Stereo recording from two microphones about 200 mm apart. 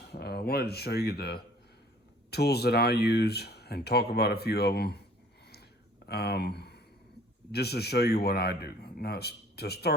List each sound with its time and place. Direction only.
0.0 s speech: 55° left (ahead or behind)
6.1 s speech: 55° left (ahead or behind)